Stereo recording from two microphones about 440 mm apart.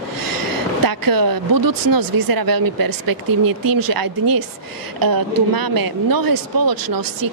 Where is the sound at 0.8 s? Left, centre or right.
Right.